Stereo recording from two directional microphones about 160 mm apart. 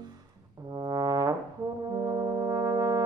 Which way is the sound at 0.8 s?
25° right (ahead or behind).